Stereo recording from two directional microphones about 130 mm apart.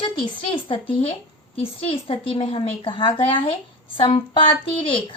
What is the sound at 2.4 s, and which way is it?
A woman's voice, 45° left (ahead or behind).